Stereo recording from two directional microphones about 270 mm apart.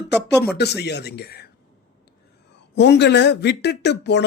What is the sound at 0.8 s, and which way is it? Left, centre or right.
Speech, left.